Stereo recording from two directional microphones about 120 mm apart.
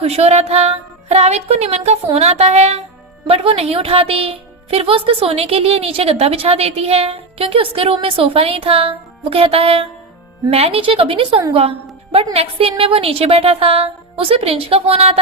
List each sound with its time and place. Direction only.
0.0 s music: 60° right (ahead or behind)
3.2 s a woman's voice: 50° right (ahead or behind)